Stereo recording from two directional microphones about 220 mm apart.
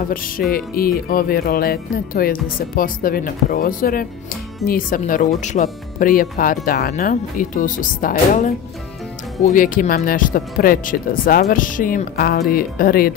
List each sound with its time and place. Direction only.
0.1 s music: 40° left (ahead or behind)